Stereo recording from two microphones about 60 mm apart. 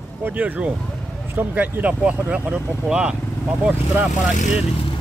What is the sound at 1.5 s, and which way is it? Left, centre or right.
Speech, right.